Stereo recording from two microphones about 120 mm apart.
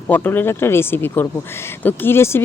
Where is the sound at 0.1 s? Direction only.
20° left (ahead or behind).